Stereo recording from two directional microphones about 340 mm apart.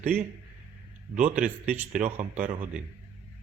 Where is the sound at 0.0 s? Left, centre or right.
Centre.